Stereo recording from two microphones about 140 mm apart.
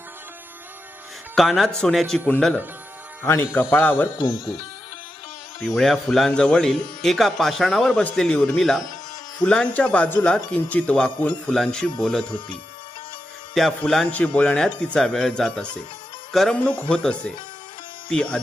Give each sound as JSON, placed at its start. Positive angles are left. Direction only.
{"t": 1.4, "sound": "speech", "side_deg": 0}
{"t": 4.2, "sound": "speech", "side_deg": -5}
{"t": 5.6, "sound": "speech", "side_deg": 0}
{"t": 13.5, "sound": "speech", "side_deg": 5}